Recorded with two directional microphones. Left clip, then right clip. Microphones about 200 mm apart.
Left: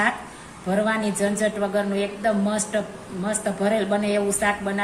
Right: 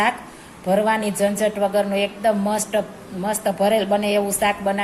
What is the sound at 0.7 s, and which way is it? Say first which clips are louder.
A woman's voice: right 4 dB; 30° right (ahead or behind).